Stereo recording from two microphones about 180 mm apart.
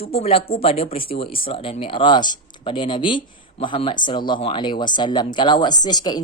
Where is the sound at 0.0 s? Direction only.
35° left (ahead or behind).